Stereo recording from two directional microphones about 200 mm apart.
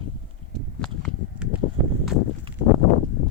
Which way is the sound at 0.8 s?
5° left (ahead or behind).